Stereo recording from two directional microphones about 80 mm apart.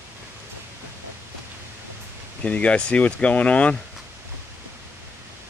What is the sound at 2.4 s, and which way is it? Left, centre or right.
Speech, centre.